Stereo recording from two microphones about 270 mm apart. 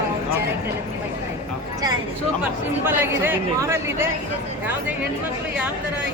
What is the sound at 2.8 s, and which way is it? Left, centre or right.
Speech, centre.